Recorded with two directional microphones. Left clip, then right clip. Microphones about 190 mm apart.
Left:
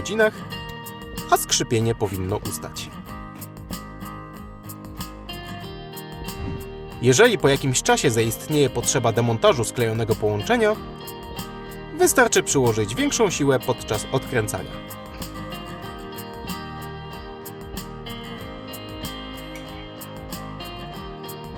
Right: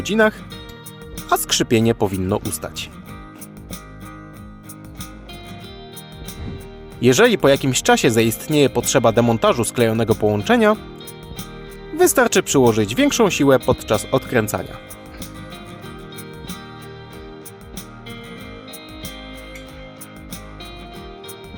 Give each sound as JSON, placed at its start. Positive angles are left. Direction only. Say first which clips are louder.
{"t": 0.0, "sound": "speech", "louder": "right 3 dB", "side_deg": -40}
{"t": 7.0, "sound": "speech", "louder": "right 2 dB", "side_deg": -40}
{"t": 11.9, "sound": "speech", "louder": "right 2 dB", "side_deg": -40}